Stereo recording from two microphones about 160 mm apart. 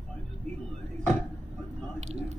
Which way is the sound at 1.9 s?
45° right (ahead or behind).